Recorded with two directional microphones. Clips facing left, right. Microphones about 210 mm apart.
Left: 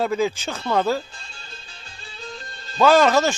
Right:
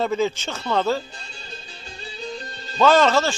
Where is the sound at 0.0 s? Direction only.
5° left (ahead or behind).